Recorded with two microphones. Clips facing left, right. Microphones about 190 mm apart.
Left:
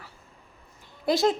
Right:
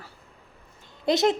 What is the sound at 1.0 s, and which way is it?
Speech, 20° right (ahead or behind).